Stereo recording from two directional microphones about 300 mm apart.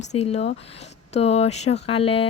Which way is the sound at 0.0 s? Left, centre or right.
Left.